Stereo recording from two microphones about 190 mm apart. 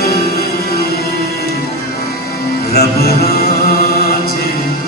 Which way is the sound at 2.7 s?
55° left (ahead or behind).